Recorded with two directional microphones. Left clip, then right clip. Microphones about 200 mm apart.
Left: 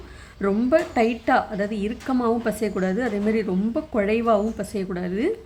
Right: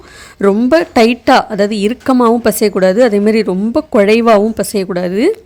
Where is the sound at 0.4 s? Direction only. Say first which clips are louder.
Right 10 dB; 40° right (ahead or behind).